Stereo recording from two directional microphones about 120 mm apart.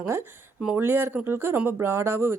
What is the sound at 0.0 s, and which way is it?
A woman's voice, 20° right (ahead or behind).